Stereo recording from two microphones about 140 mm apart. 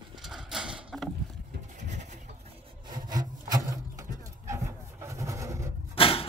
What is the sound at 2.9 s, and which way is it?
Wood, 30° right (ahead or behind).